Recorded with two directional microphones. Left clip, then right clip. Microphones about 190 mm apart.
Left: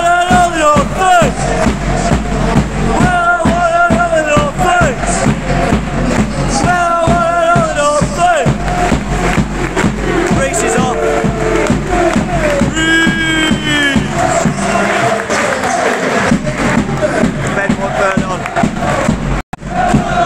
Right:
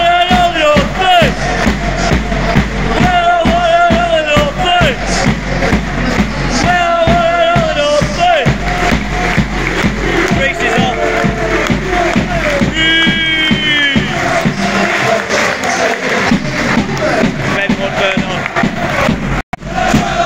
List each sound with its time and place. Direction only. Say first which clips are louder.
0.0 s music: even; 15° left (ahead or behind)
7.8 s music: even; 15° left (ahead or behind)
13.7 s music: right 1 dB; 15° left (ahead or behind)